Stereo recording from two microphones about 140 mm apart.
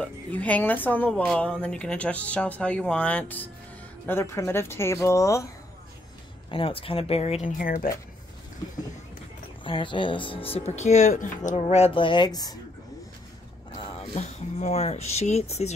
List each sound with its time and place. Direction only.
0.0 s a woman's voice: 10° left (ahead or behind)
6.5 s speech: 40° left (ahead or behind)
7.4 s speech: 70° left (ahead or behind)
9.7 s speech: 35° left (ahead or behind)
13.9 s speech: 50° left (ahead or behind)